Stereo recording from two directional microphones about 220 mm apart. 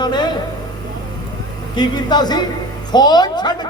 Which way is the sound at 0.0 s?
20° left (ahead or behind).